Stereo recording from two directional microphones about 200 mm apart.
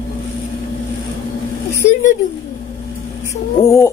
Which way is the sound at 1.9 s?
35° left (ahead or behind).